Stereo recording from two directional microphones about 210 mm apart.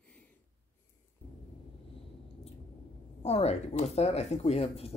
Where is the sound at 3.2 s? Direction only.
30° left (ahead or behind).